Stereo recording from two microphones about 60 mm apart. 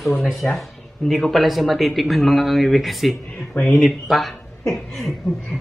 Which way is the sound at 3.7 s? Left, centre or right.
Centre.